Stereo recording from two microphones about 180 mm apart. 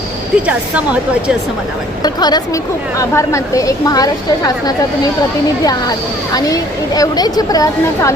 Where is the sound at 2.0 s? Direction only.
25° left (ahead or behind).